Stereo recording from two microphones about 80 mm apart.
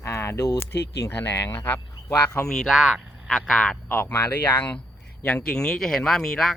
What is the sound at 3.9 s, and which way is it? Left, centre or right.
Speech, left.